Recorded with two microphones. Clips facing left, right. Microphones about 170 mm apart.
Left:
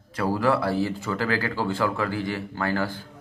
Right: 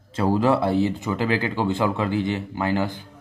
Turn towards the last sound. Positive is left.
turn(degrees=-20)  # may be behind; listen again after turning